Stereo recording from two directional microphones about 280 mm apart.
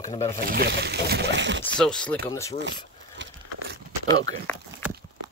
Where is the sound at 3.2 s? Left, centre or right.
Right.